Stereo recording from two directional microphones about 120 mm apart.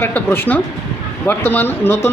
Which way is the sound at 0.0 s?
20° left (ahead or behind).